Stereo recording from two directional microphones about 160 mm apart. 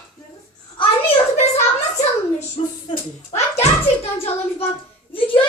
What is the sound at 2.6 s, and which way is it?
Speech, 35° left (ahead or behind).